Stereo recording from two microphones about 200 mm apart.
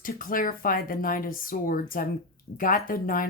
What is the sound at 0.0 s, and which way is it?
Speech, 45° left (ahead or behind).